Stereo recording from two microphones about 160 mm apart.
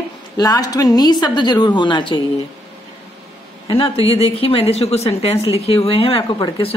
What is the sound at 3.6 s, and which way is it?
A man's voice, 30° left (ahead or behind).